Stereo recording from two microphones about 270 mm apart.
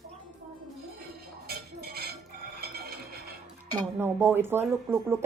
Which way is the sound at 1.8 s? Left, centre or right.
Right.